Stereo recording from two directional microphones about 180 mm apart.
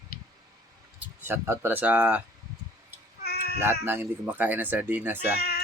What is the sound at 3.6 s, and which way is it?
Speech, 10° right (ahead or behind).